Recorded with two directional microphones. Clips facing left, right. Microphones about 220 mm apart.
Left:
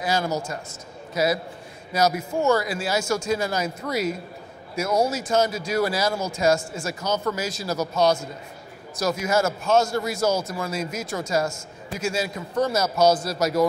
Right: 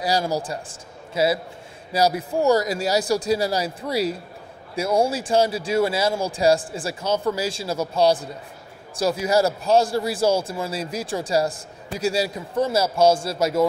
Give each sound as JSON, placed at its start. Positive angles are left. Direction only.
{"t": 0.3, "sound": "a man's voice", "side_deg": -35}